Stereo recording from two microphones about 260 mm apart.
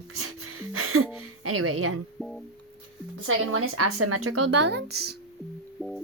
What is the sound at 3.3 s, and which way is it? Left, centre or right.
A woman's voice, right.